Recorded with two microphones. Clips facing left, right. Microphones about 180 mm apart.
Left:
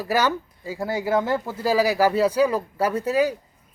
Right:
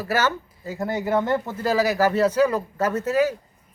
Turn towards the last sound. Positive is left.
turn(degrees=15)  # may be behind; listen again after turning